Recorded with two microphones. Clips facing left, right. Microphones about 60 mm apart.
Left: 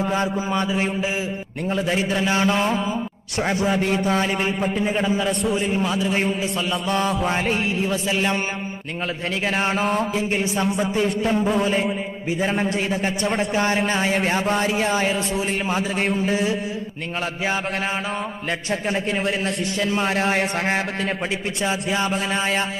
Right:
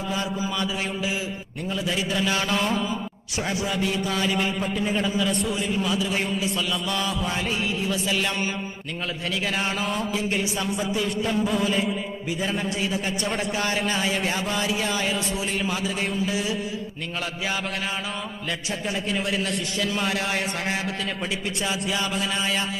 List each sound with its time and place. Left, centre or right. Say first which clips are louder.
0.1 s a man's voice: left 5 dB; left
3.4 s a man's voice: left 5 dB; left
5.3 s a man's voice: left 3 dB; left
5.5 s a man's voice: left 3 dB; left
16.0 s a man's voice: left 4 dB; left
16.3 s a man's voice: left 5 dB; left
18.7 s a man's voice: left 5 dB; left